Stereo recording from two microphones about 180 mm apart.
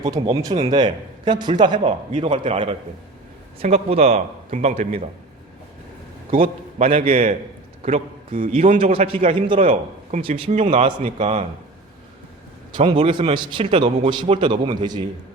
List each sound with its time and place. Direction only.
0.3 s a man's voice: 30° right (ahead or behind)
1.9 s a man's voice: 40° right (ahead or behind)
2.3 s a man's voice: 30° right (ahead or behind)
6.3 s a man's voice: 50° right (ahead or behind)
6.8 s a man's voice: 30° right (ahead or behind)
12.7 s a man's voice: 25° right (ahead or behind)